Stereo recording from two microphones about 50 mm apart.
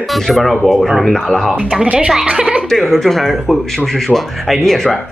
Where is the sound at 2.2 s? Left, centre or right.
Centre.